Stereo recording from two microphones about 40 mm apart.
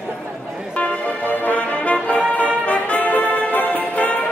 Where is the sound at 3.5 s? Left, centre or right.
Left.